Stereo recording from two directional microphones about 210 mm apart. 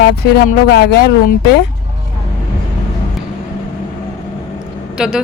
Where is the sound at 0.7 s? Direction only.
50° left (ahead or behind).